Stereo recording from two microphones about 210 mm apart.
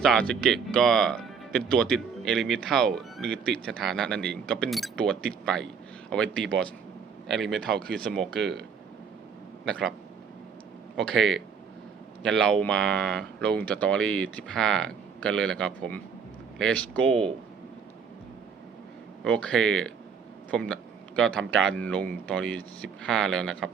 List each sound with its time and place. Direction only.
0.0 s speech: 5° left (ahead or behind)
7.6 s speech: 45° right (ahead or behind)
7.9 s speech: 5° left (ahead or behind)
9.6 s speech: 5° left (ahead or behind)
10.9 s speech: centre (ahead or behind)
19.2 s speech: 5° left (ahead or behind)